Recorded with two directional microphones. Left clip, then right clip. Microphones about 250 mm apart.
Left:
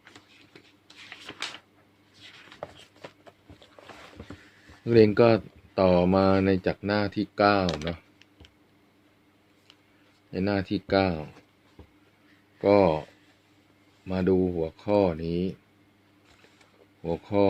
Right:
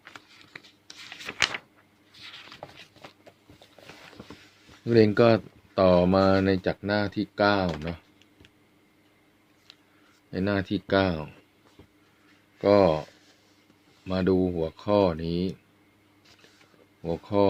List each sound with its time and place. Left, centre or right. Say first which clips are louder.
2.6 s shuffle: left 8 dB; left
4.9 s speech: left 1 dB; centre
10.3 s speech: even; centre
12.6 s speech: right 1 dB; centre
14.1 s speech: even; centre
17.0 s speech: even; centre